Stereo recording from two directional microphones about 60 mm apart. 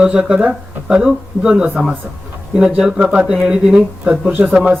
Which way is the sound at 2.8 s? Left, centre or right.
Centre.